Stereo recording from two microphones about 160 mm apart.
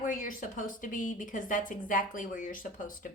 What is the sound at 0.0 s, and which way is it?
A woman's voice, 55° left (ahead or behind).